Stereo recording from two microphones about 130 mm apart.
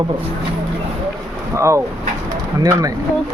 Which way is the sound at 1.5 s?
20° right (ahead or behind).